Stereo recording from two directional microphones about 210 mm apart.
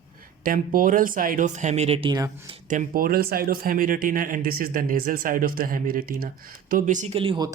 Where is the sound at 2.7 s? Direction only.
40° right (ahead or behind).